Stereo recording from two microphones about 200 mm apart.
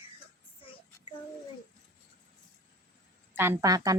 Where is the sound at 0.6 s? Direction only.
25° left (ahead or behind).